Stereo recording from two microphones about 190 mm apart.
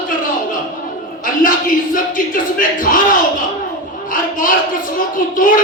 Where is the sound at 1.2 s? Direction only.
45° left (ahead or behind).